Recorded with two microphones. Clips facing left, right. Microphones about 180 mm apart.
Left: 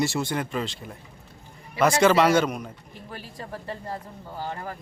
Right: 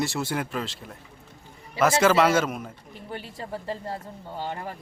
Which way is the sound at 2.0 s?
5° right (ahead or behind).